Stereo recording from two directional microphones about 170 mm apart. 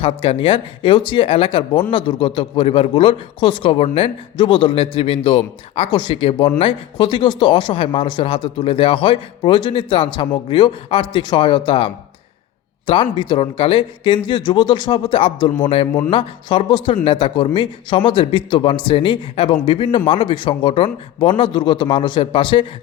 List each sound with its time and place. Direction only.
0.0 s a man's voice: 30° left (ahead or behind)